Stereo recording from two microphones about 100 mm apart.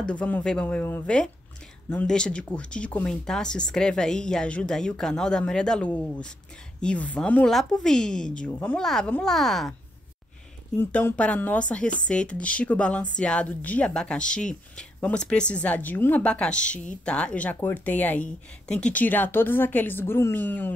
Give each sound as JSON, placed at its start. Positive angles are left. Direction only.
{"t": 0.0, "sound": "speech", "side_deg": 10}
{"t": 1.0, "sound": "a woman's voice", "side_deg": 5}
{"t": 8.5, "sound": "speech", "side_deg": 20}
{"t": 8.7, "sound": "a woman's voice", "side_deg": 5}
{"t": 10.8, "sound": "speech", "side_deg": 20}